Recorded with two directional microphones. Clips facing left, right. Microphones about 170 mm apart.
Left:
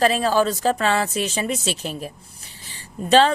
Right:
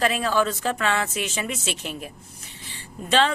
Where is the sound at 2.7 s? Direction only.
40° left (ahead or behind).